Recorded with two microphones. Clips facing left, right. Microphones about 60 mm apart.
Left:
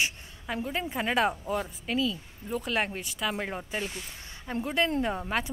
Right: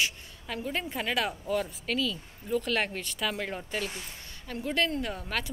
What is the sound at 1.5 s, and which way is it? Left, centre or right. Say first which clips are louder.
Speech: even; centre.